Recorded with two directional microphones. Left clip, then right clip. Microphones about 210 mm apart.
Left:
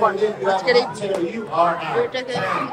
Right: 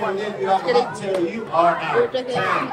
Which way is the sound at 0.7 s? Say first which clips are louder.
Left 3 dB; centre (ahead or behind).